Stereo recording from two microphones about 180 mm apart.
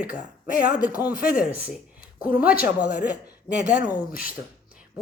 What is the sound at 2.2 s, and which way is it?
Speech, 10° right (ahead or behind).